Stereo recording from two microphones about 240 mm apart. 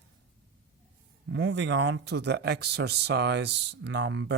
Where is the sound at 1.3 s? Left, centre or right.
Right.